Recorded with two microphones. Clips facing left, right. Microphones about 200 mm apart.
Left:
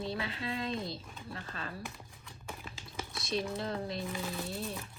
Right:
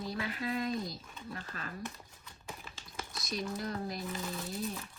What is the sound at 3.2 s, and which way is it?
Speech, 25° left (ahead or behind).